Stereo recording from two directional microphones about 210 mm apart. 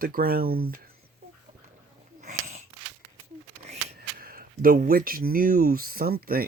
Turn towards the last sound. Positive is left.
turn(degrees=-45)  # may be behind; listen again after turning